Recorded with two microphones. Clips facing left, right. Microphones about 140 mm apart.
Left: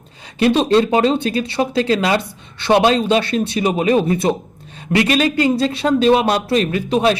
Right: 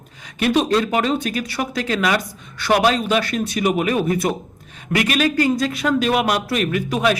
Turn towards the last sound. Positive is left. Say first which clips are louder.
# left 3 dB
turn(degrees=30)  # may be behind; listen again after turning